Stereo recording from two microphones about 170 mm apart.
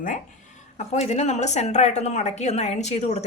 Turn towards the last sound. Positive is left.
turn(degrees=40)  # may be behind; listen again after turning